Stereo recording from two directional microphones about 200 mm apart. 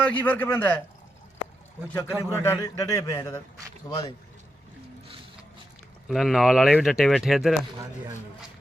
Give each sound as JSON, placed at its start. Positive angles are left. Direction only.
{"t": 0.0, "sound": "a man's voice", "side_deg": 10}
{"t": 1.9, "sound": "a man's voice", "side_deg": 10}
{"t": 6.1, "sound": "speech", "side_deg": 0}